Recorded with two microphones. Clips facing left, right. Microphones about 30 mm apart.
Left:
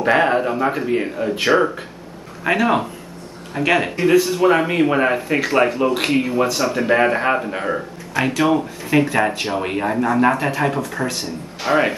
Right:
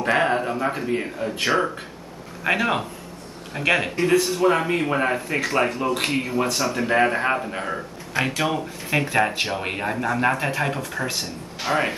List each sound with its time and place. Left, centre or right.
0.0 s speech: centre
2.4 s speech: centre
8.2 s speech: centre
8.9 s speech: centre